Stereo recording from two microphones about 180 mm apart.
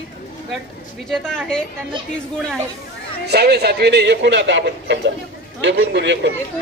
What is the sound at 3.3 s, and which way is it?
A man's voice, 65° right (ahead or behind).